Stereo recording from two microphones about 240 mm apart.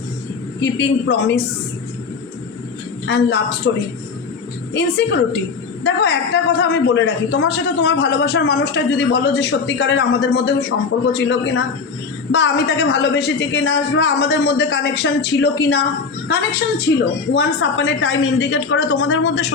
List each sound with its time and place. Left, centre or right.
0.6 s a man's voice: left
3.1 s a man's voice: left
16.9 s a man's voice: left